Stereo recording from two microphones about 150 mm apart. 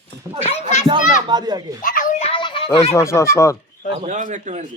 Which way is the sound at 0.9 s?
30° right (ahead or behind).